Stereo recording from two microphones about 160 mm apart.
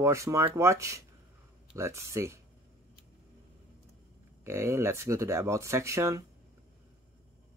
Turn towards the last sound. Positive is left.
turn(degrees=-20)  # may be behind; listen again after turning